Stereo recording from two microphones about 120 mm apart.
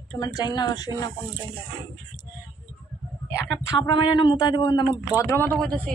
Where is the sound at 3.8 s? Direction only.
45° left (ahead or behind).